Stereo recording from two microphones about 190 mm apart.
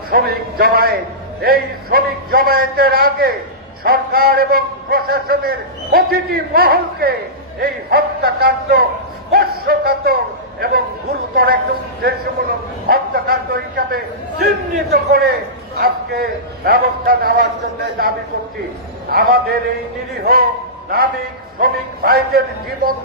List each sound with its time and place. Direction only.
0.1 s a man's voice: 55° right (ahead or behind)
21.5 s a man's voice: 50° right (ahead or behind)